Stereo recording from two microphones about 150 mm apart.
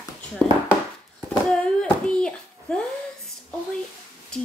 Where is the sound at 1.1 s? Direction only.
5° left (ahead or behind).